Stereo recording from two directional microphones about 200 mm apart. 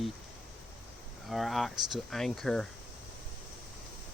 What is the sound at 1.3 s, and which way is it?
Speech, centre (ahead or behind).